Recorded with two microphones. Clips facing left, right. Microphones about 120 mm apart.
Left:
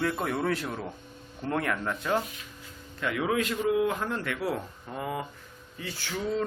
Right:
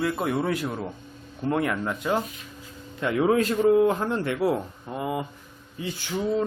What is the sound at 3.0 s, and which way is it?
Speech, 30° right (ahead or behind).